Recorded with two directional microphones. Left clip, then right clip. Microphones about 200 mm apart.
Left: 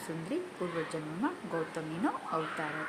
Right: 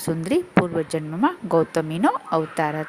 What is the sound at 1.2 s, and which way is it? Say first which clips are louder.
Speech: right 16 dB; 50° right (ahead or behind).